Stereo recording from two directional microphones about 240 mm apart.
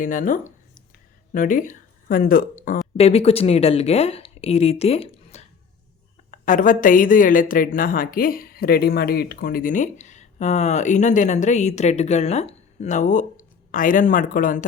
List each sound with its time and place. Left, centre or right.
0.0 s speech: left
3.0 s a woman's voice: left